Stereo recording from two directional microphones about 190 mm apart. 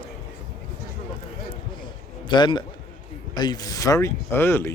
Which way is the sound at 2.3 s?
25° left (ahead or behind).